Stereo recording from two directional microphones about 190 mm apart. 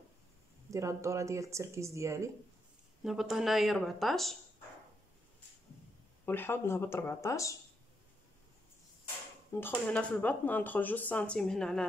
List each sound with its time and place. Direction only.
0.7 s speech: 15° right (ahead or behind)
3.0 s speech: centre (ahead or behind)
6.2 s speech: 10° left (ahead or behind)
9.5 s speech: 10° left (ahead or behind)